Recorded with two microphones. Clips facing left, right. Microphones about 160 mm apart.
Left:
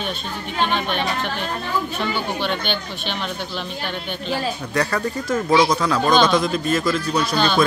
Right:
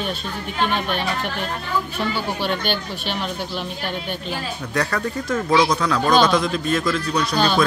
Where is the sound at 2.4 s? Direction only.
5° right (ahead or behind).